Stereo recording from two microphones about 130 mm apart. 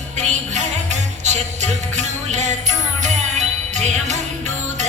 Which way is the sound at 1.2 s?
60° right (ahead or behind).